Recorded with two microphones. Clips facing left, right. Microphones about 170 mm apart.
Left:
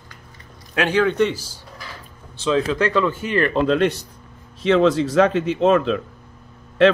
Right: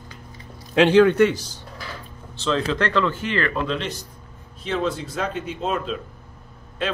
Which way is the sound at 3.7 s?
55° left (ahead or behind).